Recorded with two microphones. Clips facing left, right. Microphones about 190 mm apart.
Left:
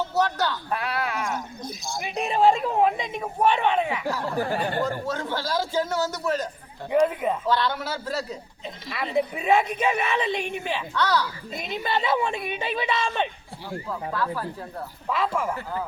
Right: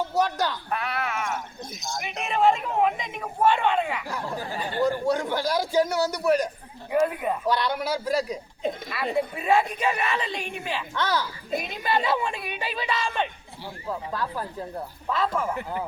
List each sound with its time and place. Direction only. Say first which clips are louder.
0.1 s speech: even; 10° right (ahead or behind)
0.7 s speech: left 1 dB; 35° left (ahead or behind)
3.4 s speech: even; 20° left (ahead or behind)
4.4 s speech: left 6 dB; 65° left (ahead or behind)
4.8 s a man's voice: right 4 dB; 15° right (ahead or behind)
6.9 s speech: left 2 dB; 20° left (ahead or behind)
7.4 s a man's voice: even; 15° right (ahead or behind)
9.1 s speech: left 2 dB; 20° left (ahead or behind)
10.9 s speech: left 3 dB; 20° right (ahead or behind)
11.6 s speech: left 2 dB; 25° left (ahead or behind)
13.8 s speech: left 1 dB; 20° right (ahead or behind)
15.1 s speech: even; 10° left (ahead or behind)